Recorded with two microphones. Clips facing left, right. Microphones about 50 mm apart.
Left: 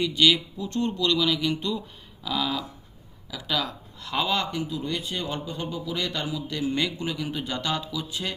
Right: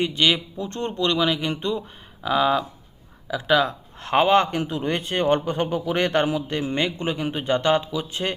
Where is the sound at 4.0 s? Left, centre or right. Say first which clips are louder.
Right 9 dB; right.